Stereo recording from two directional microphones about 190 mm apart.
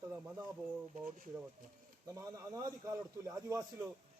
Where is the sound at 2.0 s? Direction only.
15° right (ahead or behind).